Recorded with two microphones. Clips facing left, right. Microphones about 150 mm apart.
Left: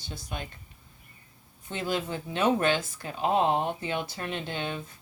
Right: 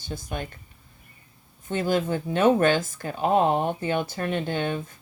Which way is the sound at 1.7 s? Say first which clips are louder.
Right 7 dB; 45° right (ahead or behind).